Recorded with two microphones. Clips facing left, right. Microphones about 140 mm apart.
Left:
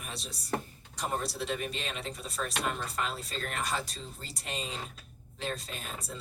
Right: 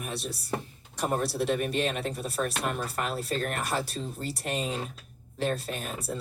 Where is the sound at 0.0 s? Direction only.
55° right (ahead or behind).